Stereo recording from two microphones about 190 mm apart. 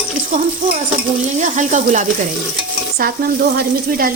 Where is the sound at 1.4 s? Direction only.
40° right (ahead or behind).